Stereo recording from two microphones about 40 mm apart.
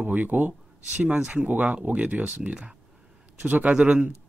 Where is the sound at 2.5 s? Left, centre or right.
Right.